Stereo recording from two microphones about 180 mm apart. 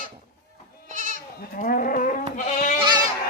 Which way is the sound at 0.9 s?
45° right (ahead or behind).